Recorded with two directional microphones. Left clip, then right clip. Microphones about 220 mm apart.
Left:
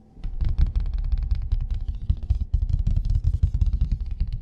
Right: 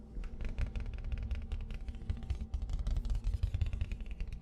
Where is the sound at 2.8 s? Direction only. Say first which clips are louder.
Left 10 dB; 45° left (ahead or behind).